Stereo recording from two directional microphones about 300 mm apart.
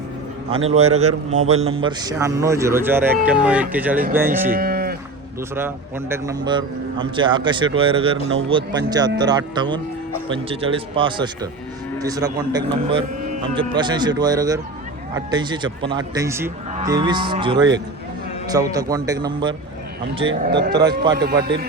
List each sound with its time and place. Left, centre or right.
0.7 s a man's voice: right
4.5 s livestock: right
5.5 s a man's voice: centre
20.5 s speech: right